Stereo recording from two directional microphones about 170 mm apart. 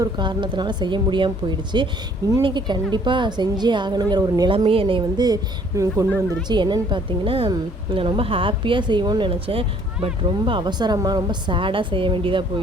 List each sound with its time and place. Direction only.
0.0 s a woman's voice: 25° right (ahead or behind)